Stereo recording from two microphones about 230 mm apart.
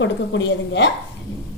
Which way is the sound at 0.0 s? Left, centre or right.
Left.